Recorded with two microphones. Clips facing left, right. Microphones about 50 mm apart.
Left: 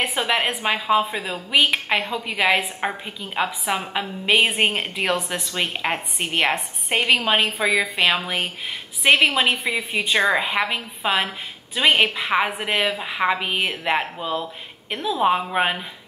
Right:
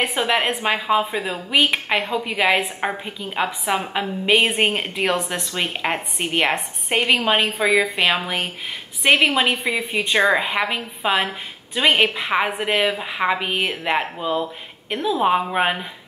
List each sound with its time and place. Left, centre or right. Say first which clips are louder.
0.0 s speech: right 2 dB; centre